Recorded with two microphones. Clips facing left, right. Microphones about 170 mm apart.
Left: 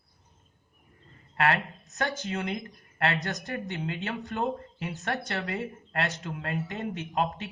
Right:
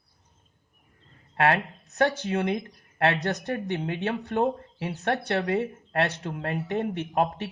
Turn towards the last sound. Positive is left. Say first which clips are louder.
# right 4 dB
turn(degrees=-65)  # may be behind; listen again after turning